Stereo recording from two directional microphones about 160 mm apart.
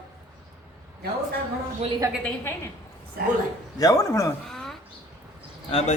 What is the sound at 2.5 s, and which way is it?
Speech, 15° left (ahead or behind).